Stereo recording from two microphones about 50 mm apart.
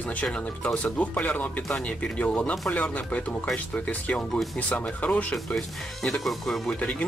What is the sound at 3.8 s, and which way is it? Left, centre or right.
Speech, left.